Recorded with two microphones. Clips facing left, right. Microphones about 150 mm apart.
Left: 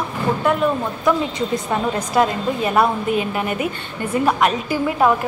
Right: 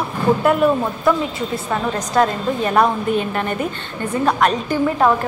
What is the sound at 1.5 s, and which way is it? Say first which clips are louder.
A woman's voice: left 1 dB; 10° left (ahead or behind).